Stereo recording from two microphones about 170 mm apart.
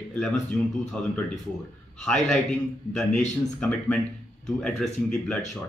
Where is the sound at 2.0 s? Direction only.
5° left (ahead or behind).